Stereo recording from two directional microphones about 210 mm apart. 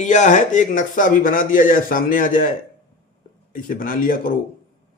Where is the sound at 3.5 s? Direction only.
40° left (ahead or behind).